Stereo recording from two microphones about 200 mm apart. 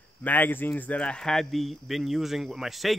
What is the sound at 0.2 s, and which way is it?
Speech, 10° left (ahead or behind).